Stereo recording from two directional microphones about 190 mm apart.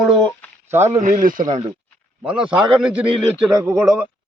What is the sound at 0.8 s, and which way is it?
Speech, 40° right (ahead or behind).